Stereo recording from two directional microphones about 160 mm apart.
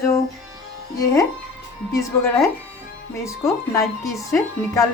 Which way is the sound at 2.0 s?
20° left (ahead or behind).